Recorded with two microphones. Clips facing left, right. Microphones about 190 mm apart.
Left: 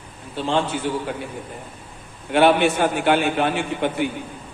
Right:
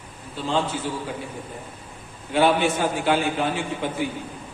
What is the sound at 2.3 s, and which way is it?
A man's voice, 65° left (ahead or behind).